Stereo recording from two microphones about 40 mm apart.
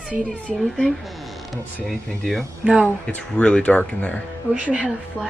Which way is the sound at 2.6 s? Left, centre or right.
Right.